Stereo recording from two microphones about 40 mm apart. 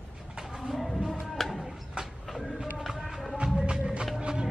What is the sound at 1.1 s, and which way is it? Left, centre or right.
Music, centre.